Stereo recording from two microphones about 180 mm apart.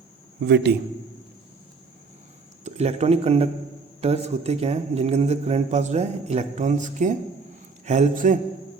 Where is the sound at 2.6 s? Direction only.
35° right (ahead or behind).